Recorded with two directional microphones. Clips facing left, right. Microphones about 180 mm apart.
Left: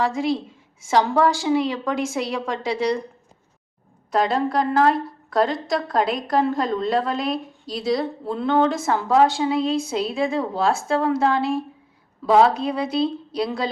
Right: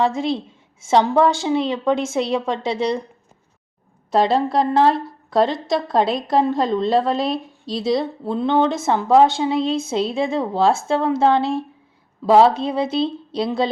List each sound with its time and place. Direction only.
0.0 s a woman's voice: 25° right (ahead or behind)
4.1 s a woman's voice: 30° right (ahead or behind)